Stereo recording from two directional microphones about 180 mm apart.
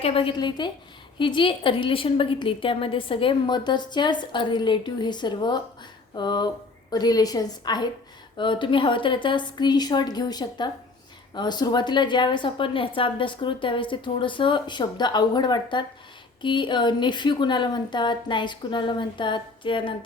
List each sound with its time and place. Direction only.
0.0 s a woman's voice: 30° left (ahead or behind)